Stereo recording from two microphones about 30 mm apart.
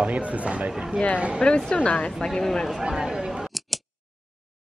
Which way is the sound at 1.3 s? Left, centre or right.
Left.